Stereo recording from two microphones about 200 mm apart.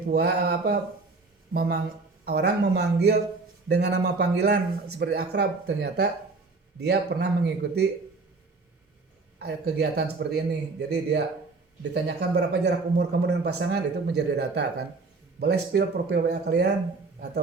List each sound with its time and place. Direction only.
0.1 s speech: 55° right (ahead or behind)
9.4 s speech: 55° right (ahead or behind)